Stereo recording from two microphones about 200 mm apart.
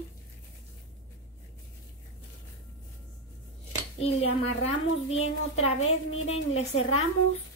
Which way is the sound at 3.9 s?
30° left (ahead or behind).